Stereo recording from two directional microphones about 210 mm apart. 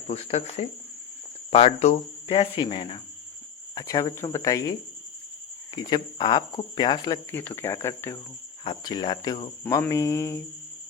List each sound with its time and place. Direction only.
0.1 s speech: 30° left (ahead or behind); by 10.4 s 15° left (ahead or behind)